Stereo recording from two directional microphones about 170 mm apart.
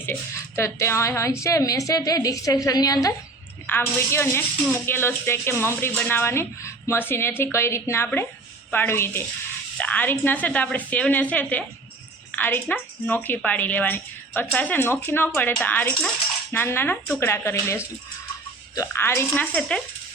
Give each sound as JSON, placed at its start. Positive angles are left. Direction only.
{"t": 0.0, "sound": "a woman's voice", "side_deg": 15}